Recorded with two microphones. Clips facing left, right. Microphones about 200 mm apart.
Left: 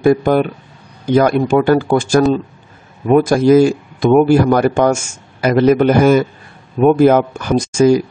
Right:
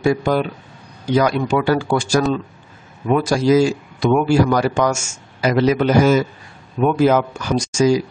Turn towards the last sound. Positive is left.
turn(degrees=55)  # may be behind; listen again after turning